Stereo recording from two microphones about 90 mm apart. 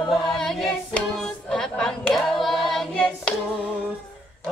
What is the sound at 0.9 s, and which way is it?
Singing, 5° left (ahead or behind).